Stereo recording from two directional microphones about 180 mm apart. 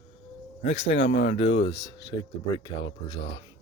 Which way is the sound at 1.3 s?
35° left (ahead or behind).